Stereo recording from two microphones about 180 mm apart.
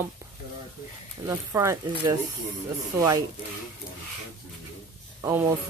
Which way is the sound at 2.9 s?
15° right (ahead or behind).